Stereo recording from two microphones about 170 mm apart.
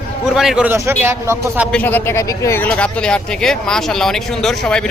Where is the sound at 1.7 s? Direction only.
10° left (ahead or behind).